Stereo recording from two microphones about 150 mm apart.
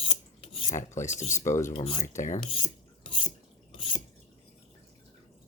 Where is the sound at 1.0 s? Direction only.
50° left (ahead or behind).